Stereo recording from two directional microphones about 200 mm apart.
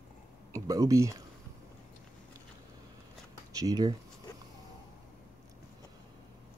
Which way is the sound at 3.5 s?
15° right (ahead or behind).